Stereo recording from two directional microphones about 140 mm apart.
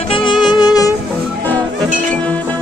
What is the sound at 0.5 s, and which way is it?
Music, 30° left (ahead or behind).